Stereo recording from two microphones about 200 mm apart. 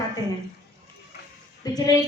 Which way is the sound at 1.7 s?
20° left (ahead or behind).